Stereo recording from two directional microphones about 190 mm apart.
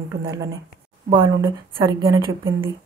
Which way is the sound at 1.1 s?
20° right (ahead or behind).